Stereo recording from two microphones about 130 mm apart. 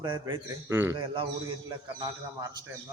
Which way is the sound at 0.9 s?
40° right (ahead or behind).